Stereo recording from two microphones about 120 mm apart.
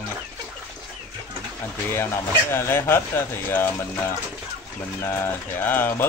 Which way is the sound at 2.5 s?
20° left (ahead or behind).